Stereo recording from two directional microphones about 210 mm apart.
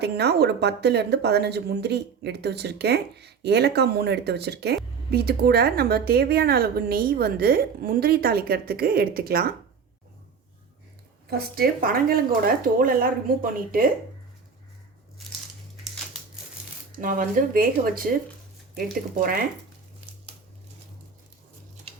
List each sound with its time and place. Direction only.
0.0 s speech: 50° right (ahead or behind)
11.3 s speech: 45° right (ahead or behind)
17.0 s speech: 40° right (ahead or behind)
19.2 s speech: 40° right (ahead or behind)